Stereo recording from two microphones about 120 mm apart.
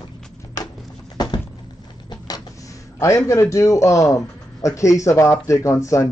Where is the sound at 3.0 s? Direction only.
25° left (ahead or behind).